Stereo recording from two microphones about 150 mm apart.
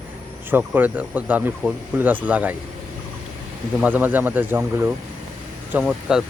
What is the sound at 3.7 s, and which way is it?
Speech, 10° right (ahead or behind).